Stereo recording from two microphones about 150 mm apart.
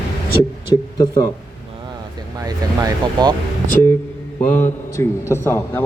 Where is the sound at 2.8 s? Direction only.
30° right (ahead or behind).